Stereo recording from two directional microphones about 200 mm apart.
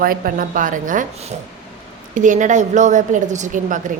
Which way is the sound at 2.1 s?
40° right (ahead or behind).